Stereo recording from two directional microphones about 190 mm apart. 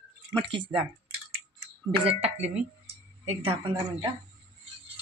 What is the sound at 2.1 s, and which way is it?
Speech, 35° right (ahead or behind).